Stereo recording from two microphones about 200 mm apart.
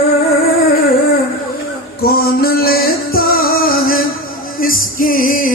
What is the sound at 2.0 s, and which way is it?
Music, 50° left (ahead or behind).